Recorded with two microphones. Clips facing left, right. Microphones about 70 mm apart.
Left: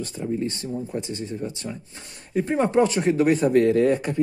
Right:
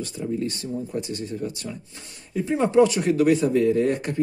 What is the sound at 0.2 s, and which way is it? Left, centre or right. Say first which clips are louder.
Speech: left 1 dB; left.